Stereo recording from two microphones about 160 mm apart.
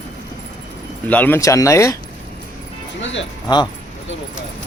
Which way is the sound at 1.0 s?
10° left (ahead or behind).